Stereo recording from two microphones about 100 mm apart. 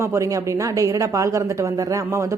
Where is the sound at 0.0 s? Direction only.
30° right (ahead or behind).